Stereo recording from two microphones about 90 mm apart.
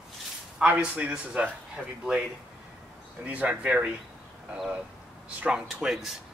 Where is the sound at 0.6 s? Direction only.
15° right (ahead or behind).